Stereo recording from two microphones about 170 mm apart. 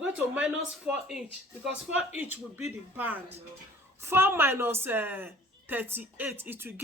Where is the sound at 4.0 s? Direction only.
15° right (ahead or behind).